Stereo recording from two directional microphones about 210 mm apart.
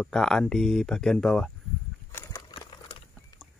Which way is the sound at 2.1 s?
15° left (ahead or behind).